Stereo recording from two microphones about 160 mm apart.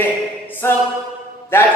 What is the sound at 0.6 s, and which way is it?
Speech, 15° left (ahead or behind).